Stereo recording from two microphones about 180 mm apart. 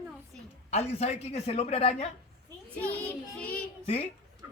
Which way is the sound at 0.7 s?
35° left (ahead or behind).